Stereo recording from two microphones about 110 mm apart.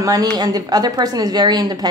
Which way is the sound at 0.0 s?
35° right (ahead or behind).